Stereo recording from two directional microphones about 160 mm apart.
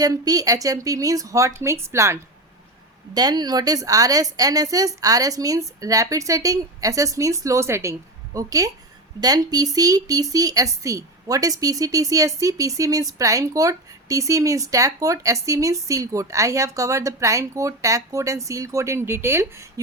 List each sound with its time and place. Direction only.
0.0 s speech: 20° right (ahead or behind)
3.2 s speech: 25° right (ahead or behind)